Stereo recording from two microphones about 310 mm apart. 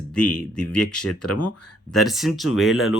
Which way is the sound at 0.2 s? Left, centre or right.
Left.